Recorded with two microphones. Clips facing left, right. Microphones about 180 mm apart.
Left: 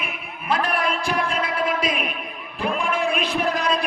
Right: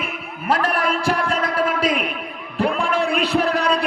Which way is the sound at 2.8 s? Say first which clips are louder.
Right 3 dB; 35° right (ahead or behind).